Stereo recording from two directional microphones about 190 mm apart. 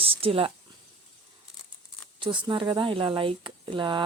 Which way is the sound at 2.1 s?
25° right (ahead or behind).